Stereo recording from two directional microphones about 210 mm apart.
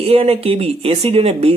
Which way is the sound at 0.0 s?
30° right (ahead or behind).